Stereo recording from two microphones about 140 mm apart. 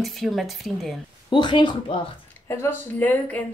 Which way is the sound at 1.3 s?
35° left (ahead or behind).